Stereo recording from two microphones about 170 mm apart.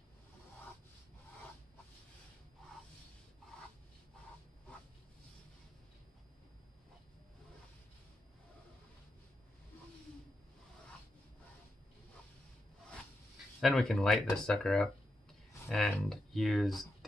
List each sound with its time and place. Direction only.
13.6 s speech: centre (ahead or behind)